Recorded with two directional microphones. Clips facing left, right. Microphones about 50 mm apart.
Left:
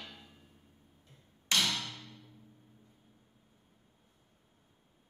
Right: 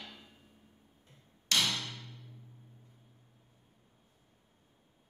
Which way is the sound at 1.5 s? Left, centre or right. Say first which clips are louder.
Even; left.